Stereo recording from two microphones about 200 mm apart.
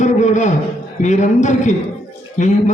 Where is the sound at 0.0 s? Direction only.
35° left (ahead or behind).